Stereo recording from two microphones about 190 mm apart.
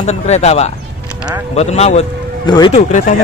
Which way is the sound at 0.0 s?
35° left (ahead or behind).